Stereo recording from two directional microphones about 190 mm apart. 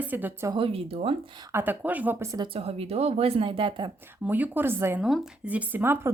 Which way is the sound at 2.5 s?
30° right (ahead or behind).